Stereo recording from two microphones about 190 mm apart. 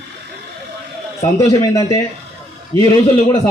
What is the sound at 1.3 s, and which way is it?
Speech, 15° left (ahead or behind).